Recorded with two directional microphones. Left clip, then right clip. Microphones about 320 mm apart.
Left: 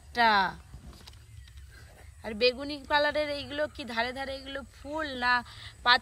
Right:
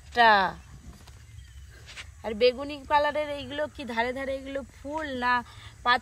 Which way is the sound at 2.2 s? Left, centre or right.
Centre.